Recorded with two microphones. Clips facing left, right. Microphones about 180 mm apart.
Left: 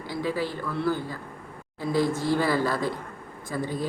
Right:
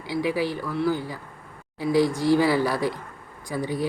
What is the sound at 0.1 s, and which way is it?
Speech, 15° right (ahead or behind).